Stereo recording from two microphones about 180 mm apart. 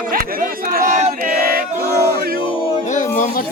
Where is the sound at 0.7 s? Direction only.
50° right (ahead or behind).